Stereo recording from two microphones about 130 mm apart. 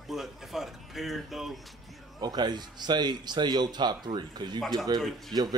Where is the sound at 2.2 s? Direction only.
30° right (ahead or behind).